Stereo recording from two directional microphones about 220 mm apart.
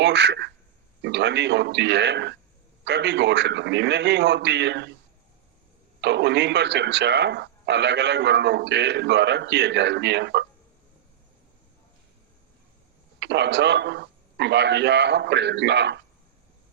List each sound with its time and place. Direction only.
0.0 s speech: 50° right (ahead or behind)
6.0 s speech: 50° right (ahead or behind)
13.1 s speech: 50° right (ahead or behind)